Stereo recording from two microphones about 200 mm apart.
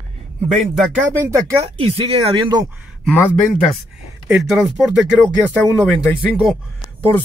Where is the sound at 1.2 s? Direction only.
15° right (ahead or behind).